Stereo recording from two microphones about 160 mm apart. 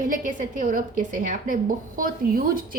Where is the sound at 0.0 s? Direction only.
55° right (ahead or behind).